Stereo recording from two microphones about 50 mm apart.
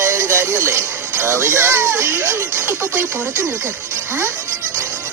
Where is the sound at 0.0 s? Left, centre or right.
Right.